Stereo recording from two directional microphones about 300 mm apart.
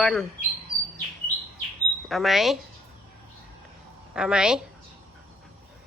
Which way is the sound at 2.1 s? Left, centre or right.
Centre.